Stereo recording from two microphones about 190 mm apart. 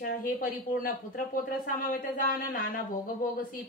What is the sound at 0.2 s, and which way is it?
Speech, 50° left (ahead or behind).